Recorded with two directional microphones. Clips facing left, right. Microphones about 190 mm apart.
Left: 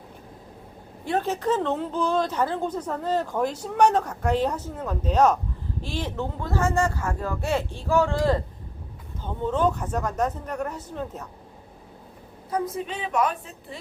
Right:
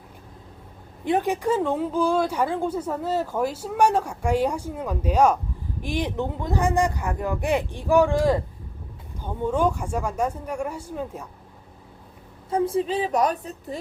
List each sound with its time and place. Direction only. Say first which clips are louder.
1.0 s speech: right 2 dB; 15° right (ahead or behind)
12.5 s a woman's voice: right 5 dB; 30° right (ahead or behind)